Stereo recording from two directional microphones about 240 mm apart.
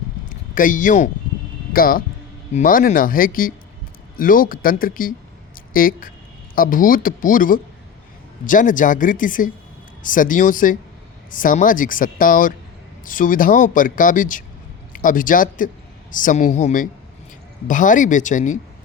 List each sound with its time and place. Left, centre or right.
0.3 s a man's voice: left